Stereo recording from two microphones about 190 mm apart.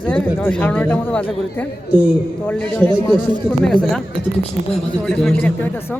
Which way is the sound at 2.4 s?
10° left (ahead or behind).